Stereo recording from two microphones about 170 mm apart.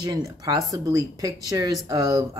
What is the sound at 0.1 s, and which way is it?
Speech, 20° right (ahead or behind).